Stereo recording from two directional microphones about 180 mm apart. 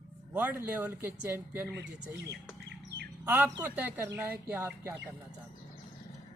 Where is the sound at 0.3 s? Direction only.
10° right (ahead or behind).